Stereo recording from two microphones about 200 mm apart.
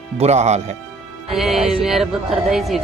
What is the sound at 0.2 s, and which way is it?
Speech, 35° right (ahead or behind).